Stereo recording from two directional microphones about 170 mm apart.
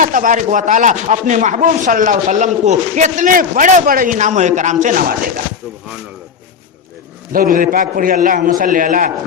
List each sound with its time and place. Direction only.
0.0 s speech: 50° right (ahead or behind)
7.3 s speech: 55° right (ahead or behind)